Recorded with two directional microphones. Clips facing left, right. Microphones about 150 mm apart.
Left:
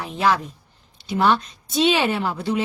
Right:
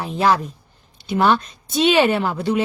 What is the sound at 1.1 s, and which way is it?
A woman's voice, 55° right (ahead or behind).